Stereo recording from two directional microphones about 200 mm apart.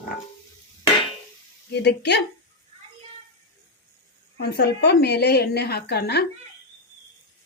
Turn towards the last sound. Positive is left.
turn(degrees=55)  # may be behind; listen again after turning